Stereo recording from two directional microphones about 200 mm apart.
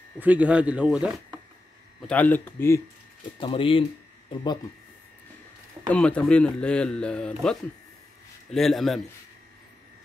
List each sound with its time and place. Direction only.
0.2 s a man's voice: 5° right (ahead or behind)
2.0 s speech: 5° left (ahead or behind)
3.3 s speech: 25° left (ahead or behind)
5.9 s a man's voice: 5° left (ahead or behind)